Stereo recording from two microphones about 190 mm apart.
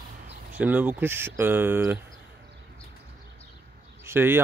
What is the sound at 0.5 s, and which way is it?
Speech, 10° right (ahead or behind).